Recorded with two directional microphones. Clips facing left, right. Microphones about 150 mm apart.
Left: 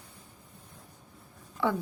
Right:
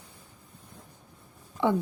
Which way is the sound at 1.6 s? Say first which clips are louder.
Right 3 dB; 20° right (ahead or behind).